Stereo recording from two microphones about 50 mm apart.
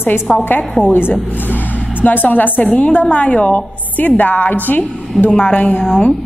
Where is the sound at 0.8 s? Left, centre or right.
Centre.